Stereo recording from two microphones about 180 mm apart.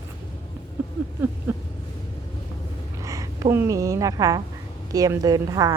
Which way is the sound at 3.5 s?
15° right (ahead or behind).